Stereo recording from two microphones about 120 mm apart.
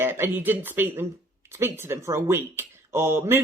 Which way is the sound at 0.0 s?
20° right (ahead or behind).